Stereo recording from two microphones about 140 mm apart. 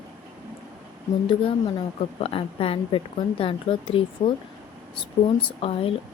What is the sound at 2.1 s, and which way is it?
Speech, 45° left (ahead or behind).